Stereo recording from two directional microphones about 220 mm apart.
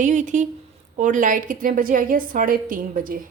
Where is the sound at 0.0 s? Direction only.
35° right (ahead or behind).